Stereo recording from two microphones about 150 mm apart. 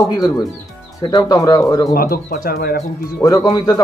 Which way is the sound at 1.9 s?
85° left.